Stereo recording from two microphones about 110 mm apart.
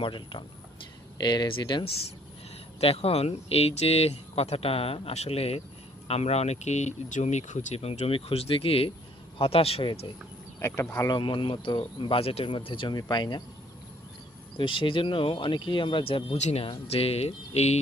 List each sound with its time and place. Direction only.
0.0 s speech: 50° left (ahead or behind)
2.8 s speech: 60° left (ahead or behind)
10.6 s speech: 25° left (ahead or behind)
11.1 s speech: 50° left (ahead or behind)
12.2 s speech: 65° left (ahead or behind)
12.5 s speech: 50° left (ahead or behind)
13.0 s speech: 40° left (ahead or behind)
14.5 s speech: 50° left (ahead or behind); by 17.7 s 75° left (ahead or behind)